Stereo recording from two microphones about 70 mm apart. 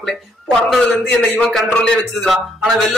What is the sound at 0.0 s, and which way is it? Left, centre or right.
Speech, centre.